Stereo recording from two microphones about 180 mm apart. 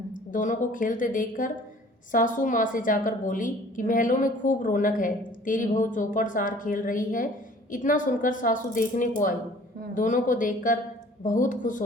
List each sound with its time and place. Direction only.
0.1 s a woman's voice: 45° left (ahead or behind)